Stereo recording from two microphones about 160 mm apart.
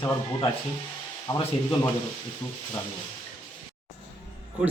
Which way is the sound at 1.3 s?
20° left (ahead or behind).